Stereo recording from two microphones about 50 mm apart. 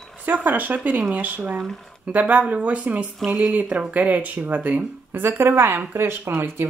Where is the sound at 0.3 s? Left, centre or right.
Right.